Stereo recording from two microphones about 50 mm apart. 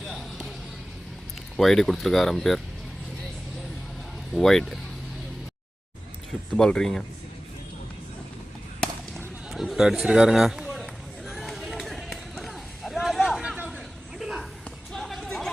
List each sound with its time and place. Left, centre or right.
0.0 s basketball bounce: centre
1.5 s speech: centre
4.3 s speech: centre
6.6 s speech: centre
8.8 s fireworks: centre
9.1 s a sound: centre
11.3 s run: centre
12.4 s a sound: centre
14.9 s a sound: centre